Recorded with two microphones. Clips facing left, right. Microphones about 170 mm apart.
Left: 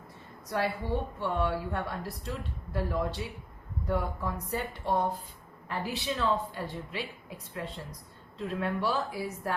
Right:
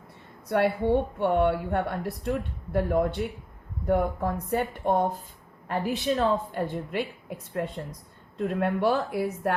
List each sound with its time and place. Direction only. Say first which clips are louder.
0.4 s a woman's voice: right 8 dB; 60° right (ahead or behind)